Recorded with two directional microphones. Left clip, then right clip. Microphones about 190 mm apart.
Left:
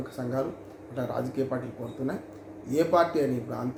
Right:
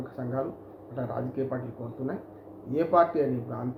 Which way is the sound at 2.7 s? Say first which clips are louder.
Even; 10° left (ahead or behind).